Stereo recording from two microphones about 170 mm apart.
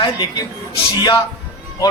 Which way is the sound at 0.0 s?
25° left (ahead or behind).